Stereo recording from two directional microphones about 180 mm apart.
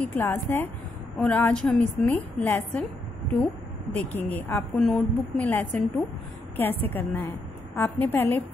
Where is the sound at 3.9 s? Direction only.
10° left (ahead or behind).